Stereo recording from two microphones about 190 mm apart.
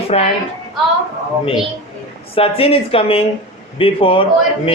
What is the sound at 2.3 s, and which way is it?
A man's voice, 30° left (ahead or behind).